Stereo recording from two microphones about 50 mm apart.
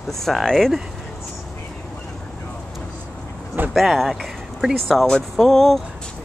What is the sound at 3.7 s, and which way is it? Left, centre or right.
Speech, centre.